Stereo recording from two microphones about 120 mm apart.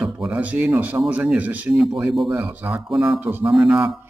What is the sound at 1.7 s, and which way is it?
Speech, centre (ahead or behind).